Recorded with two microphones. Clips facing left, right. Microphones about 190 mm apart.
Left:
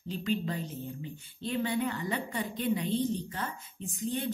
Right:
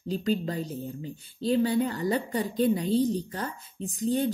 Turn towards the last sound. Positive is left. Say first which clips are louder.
# right 7 dB
turn(degrees=-35)  # may be behind; listen again after turning